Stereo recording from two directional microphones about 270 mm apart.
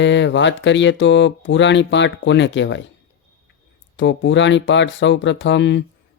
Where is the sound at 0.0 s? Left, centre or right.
Left.